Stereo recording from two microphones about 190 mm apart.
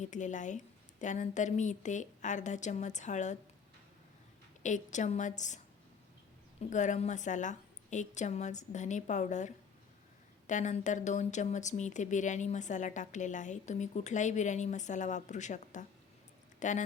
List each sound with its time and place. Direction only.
0.0 s a woman's voice: 40° left (ahead or behind)
4.6 s a woman's voice: 40° left (ahead or behind)
6.6 s a woman's voice: 40° left (ahead or behind)